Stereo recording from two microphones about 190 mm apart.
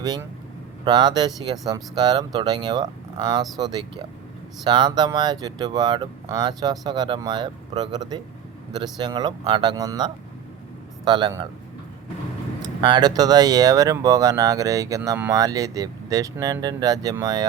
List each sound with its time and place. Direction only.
0.0 s a man's voice: 20° right (ahead or behind)
12.6 s speech: 20° right (ahead or behind)